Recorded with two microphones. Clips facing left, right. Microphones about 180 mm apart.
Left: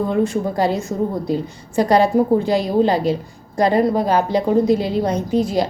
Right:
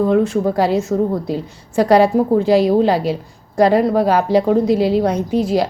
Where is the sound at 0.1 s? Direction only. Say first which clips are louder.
Right 4 dB; 5° right (ahead or behind).